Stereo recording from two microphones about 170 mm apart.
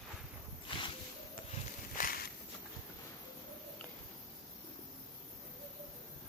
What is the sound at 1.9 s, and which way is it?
Walk, 55° left (ahead or behind).